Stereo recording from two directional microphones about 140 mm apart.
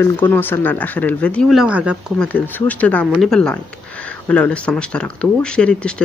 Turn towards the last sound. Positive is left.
turn(degrees=5)  # may be behind; listen again after turning